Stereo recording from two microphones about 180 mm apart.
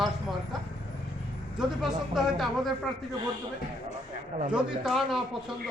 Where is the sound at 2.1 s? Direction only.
Centre (ahead or behind).